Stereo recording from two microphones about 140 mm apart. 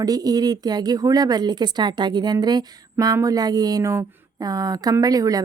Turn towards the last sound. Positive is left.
turn(degrees=-25)  # may be behind; listen again after turning